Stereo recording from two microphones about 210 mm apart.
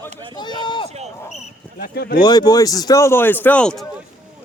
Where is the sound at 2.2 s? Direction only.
20° left (ahead or behind).